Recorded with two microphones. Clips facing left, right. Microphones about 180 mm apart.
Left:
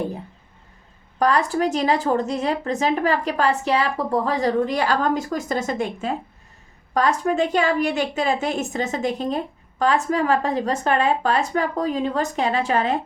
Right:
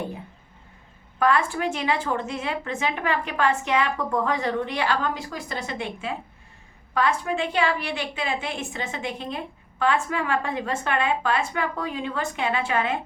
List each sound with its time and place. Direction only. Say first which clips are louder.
1.2 s a woman's voice: left 3 dB; 40° left (ahead or behind)